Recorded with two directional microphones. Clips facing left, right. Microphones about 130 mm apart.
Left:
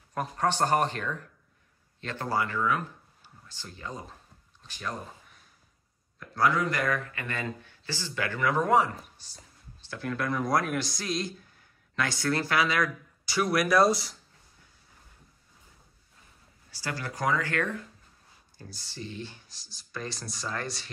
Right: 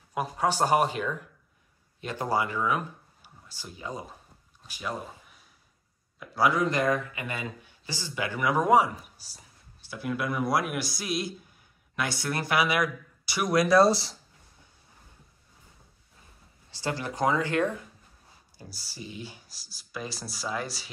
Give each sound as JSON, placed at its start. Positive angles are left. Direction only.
{"t": 0.1, "sound": "speech", "side_deg": -5}
{"t": 6.6, "sound": "speech", "side_deg": -20}
{"t": 16.7, "sound": "speech", "side_deg": -20}
{"t": 18.6, "sound": "speech", "side_deg": -5}